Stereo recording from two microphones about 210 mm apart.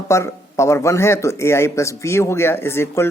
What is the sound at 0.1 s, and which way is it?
Speech, 15° left (ahead or behind).